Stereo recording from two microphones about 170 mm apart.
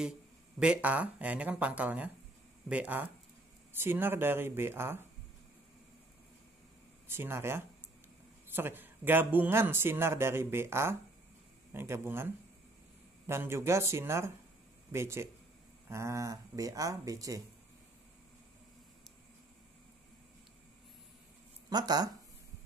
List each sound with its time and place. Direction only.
0.6 s speech: 5° right (ahead or behind)
7.1 s speech: 15° right (ahead or behind)
13.3 s speech: 15° right (ahead or behind)
21.6 s speech: 25° right (ahead or behind)